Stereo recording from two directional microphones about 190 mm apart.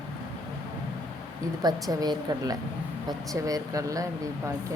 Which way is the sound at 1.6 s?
20° right (ahead or behind).